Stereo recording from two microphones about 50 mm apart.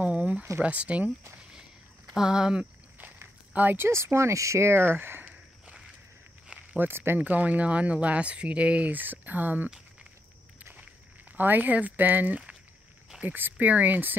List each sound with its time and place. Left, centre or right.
0.0 s a sound: right
0.6 s speech: right
2.1 s speech: centre
3.7 s speech: right
5.2 s walk: right
6.8 s speech: right
7.2 s speech: right
11.3 s speech: right